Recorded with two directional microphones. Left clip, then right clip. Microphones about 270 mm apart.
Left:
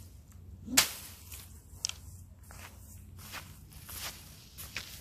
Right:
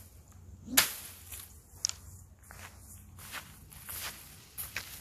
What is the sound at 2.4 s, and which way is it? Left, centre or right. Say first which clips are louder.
Walk: right 1 dB; centre.